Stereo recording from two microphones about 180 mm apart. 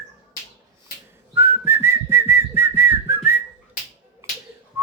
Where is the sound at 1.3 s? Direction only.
10° right (ahead or behind).